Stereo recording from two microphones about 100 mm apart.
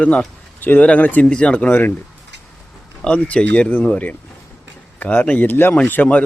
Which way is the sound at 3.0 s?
10° left (ahead or behind).